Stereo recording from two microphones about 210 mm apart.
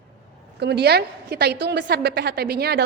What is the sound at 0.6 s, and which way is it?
A woman's voice, 50° right (ahead or behind).